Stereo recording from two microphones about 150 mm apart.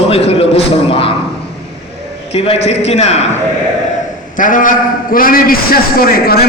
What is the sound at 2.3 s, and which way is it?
Speech, 45° left (ahead or behind).